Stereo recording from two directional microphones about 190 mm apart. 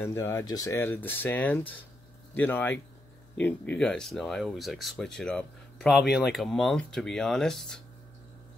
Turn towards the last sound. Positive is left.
turn(degrees=5)  # may be behind; listen again after turning